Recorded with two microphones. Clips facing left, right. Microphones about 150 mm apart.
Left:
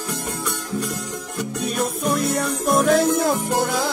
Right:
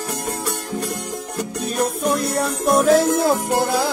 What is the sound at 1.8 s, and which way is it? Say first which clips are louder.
Music: right 2 dB; centre (ahead or behind).